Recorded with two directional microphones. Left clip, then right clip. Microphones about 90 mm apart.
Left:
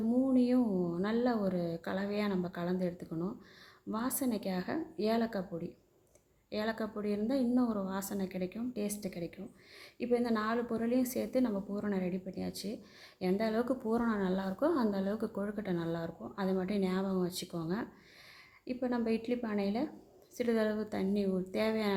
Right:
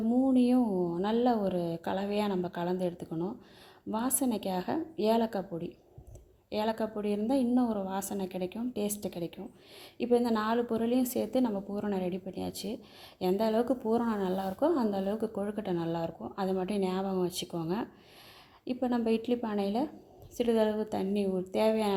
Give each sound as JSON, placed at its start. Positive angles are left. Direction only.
{"t": 0.3, "sound": "a woman's voice", "side_deg": -30}
{"t": 3.1, "sound": "speech", "side_deg": -20}
{"t": 3.9, "sound": "a woman's voice", "side_deg": -30}
{"t": 6.5, "sound": "a woman's voice", "side_deg": -30}